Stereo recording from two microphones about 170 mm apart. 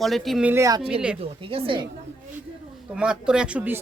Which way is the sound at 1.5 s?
30° right (ahead or behind).